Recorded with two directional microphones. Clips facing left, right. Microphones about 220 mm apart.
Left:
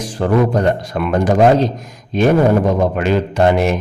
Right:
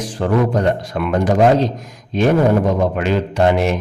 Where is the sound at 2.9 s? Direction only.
45° left (ahead or behind).